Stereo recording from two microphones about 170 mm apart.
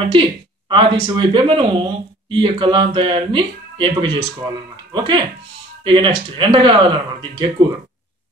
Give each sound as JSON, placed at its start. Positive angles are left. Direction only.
{"t": 0.1, "sound": "speech", "side_deg": -30}